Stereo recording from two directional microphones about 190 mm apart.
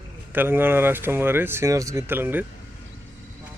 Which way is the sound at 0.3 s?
10° right (ahead or behind).